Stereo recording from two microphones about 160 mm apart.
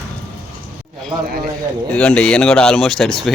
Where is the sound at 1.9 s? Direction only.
10° left (ahead or behind).